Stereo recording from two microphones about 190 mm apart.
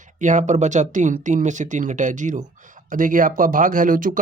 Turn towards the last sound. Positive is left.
turn(degrees=-45)  # may be behind; listen again after turning